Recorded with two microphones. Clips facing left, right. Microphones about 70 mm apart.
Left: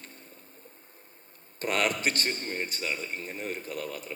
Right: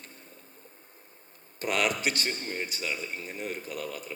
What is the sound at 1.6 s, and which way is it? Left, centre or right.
A man's voice, left.